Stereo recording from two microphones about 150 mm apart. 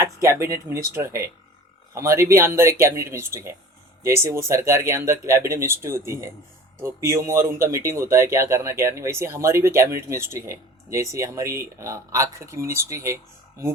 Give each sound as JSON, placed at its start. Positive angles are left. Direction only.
{"t": 0.0, "sound": "speech", "side_deg": -20}